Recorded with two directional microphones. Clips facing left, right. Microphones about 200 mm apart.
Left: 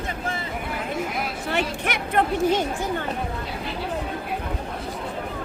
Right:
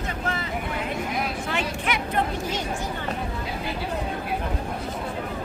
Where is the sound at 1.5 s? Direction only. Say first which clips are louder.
Left 3 dB; 55° left (ahead or behind).